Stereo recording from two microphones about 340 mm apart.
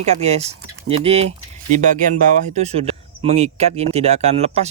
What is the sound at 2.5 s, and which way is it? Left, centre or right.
Speech, centre.